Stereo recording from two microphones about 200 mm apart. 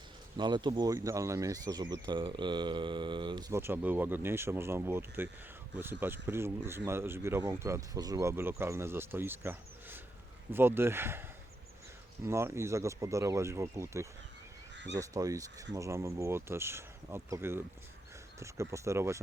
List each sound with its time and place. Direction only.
0.3 s speech: 20° right (ahead or behind)
3.5 s speech: 10° right (ahead or behind)